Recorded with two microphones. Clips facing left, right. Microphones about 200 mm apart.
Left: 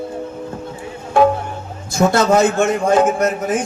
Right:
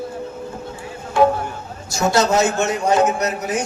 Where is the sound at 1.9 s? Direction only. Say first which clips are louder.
Left 3 dB; 55° left (ahead or behind).